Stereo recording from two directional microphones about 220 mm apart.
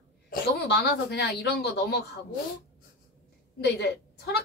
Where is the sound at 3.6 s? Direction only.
50° left (ahead or behind).